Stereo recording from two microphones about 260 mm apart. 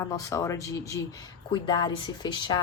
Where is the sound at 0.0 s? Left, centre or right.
Centre.